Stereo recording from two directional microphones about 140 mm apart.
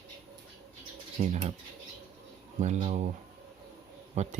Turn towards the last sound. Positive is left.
turn(degrees=-55)  # may be behind; listen again after turning